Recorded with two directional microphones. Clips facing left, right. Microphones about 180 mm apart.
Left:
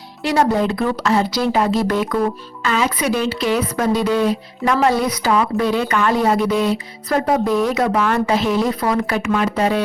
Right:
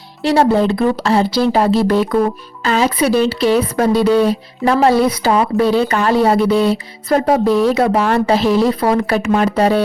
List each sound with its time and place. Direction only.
0.2 s a woman's voice: 30° right (ahead or behind)